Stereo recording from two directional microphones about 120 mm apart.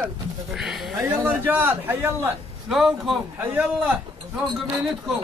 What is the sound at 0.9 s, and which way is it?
A man's voice, 20° right (ahead or behind).